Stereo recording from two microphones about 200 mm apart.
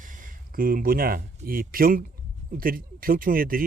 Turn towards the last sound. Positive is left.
turn(degrees=-45)  # may be behind; listen again after turning